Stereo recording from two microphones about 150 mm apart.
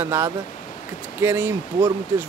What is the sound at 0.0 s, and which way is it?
Speech, 15° right (ahead or behind).